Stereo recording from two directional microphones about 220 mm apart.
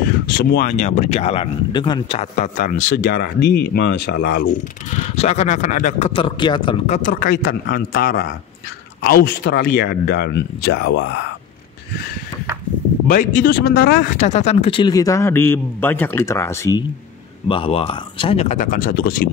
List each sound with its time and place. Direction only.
0.4 s speech: 40° left (ahead or behind)
5.1 s speech: 30° left (ahead or behind)
7.0 s speech: 40° left (ahead or behind); by 11.2 s 55° left (ahead or behind)
13.1 s speech: 35° left (ahead or behind)
14.2 s a man's voice: 30° left (ahead or behind); by 16.8 s 15° left (ahead or behind)
17.5 s speech: 25° left (ahead or behind)